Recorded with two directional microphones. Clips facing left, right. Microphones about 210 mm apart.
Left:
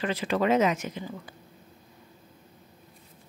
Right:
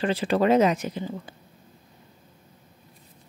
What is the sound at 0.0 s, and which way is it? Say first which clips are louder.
Speech: right 4 dB; 30° right (ahead or behind).